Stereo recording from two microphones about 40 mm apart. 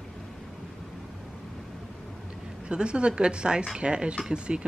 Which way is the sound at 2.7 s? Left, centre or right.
Right.